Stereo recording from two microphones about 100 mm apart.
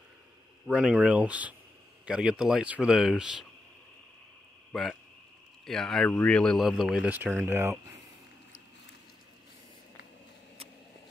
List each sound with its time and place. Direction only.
0.7 s speech: 10° right (ahead or behind)
4.7 s speech: centre (ahead or behind)
6.0 s speech: 15° left (ahead or behind); by 7.1 s 5° right (ahead or behind)
7.4 s speech: 25° right (ahead or behind)